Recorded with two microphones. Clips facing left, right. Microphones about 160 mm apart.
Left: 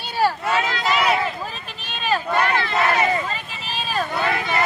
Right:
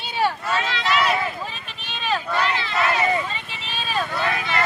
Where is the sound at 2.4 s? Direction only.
55° left (ahead or behind).